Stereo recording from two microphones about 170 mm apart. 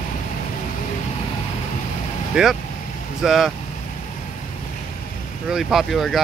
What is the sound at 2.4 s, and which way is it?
Speech, 5° right (ahead or behind).